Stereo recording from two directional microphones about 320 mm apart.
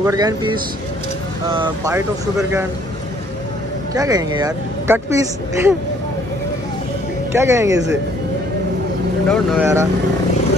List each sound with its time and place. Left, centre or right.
0.0 s speech: centre
3.9 s speech: centre
7.3 s speech: centre
9.3 s speech: centre